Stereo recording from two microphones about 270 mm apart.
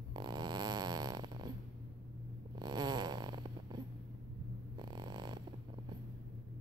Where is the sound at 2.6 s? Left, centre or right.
Centre.